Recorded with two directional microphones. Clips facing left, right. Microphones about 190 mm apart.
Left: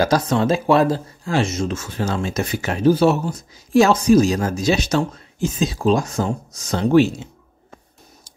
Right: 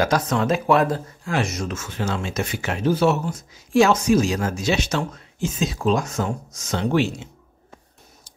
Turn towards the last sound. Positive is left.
turn(degrees=40)  # may be behind; listen again after turning